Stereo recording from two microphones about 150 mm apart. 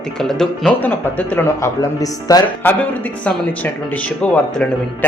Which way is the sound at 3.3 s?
10° left (ahead or behind).